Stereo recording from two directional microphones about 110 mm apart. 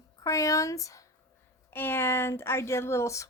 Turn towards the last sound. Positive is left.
turn(degrees=25)  # may be behind; listen again after turning